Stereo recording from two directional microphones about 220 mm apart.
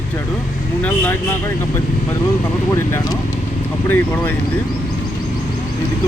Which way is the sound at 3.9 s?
10° left (ahead or behind).